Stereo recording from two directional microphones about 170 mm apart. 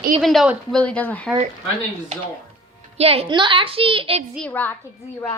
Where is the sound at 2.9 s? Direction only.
35° right (ahead or behind).